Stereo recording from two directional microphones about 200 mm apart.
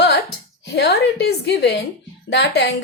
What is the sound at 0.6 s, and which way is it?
A woman's voice, 55° left (ahead or behind).